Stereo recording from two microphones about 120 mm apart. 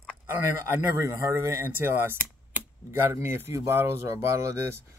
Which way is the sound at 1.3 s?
20° right (ahead or behind).